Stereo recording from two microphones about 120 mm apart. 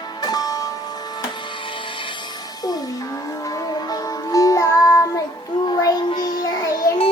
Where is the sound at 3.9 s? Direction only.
30° left (ahead or behind).